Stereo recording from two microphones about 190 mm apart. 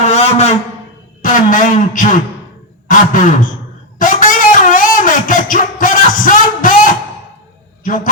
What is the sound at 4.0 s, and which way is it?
Music, 45° left (ahead or behind).